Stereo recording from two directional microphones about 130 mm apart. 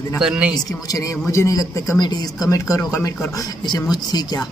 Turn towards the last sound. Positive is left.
turn(degrees=30)  # may be behind; listen again after turning